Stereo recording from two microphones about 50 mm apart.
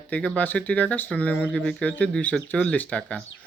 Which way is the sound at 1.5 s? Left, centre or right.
Centre.